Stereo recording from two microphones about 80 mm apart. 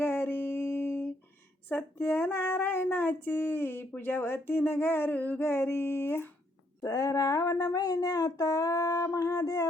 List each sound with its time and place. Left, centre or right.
0.0 s music: left
1.7 s speech: left
6.8 s a sound: left